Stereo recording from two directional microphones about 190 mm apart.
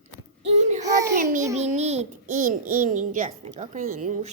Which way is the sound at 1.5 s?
35° right (ahead or behind).